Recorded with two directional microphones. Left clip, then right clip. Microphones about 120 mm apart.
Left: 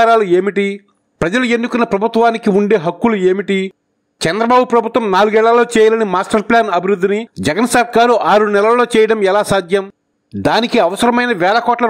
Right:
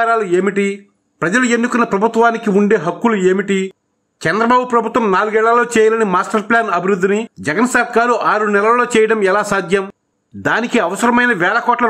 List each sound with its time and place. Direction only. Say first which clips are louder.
0.0 s a man's voice: left 4 dB; 60° left (ahead or behind)